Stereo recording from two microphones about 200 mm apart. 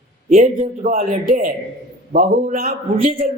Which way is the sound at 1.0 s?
45° right (ahead or behind).